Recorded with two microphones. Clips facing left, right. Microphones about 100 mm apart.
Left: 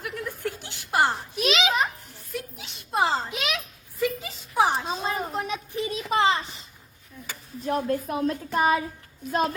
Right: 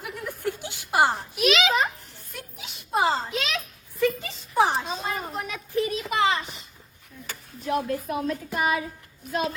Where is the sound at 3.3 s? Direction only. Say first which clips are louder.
Right 1 dB; 15° left (ahead or behind).